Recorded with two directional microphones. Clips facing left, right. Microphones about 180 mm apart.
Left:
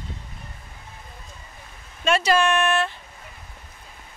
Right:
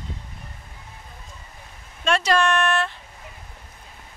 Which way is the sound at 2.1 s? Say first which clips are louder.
Left 1 dB; 5° left (ahead or behind).